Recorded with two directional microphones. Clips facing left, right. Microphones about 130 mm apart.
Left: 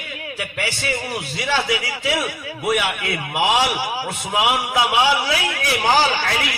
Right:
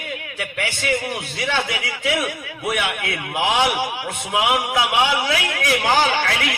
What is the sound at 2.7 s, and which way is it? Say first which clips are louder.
Speech: left 2 dB; 50° right (ahead or behind).